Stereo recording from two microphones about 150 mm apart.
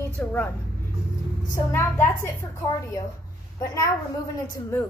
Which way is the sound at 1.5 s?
20° left (ahead or behind).